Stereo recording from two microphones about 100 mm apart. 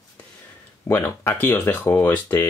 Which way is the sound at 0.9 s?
25° left (ahead or behind).